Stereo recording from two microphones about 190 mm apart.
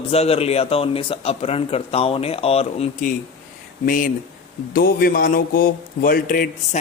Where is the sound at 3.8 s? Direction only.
45° left (ahead or behind).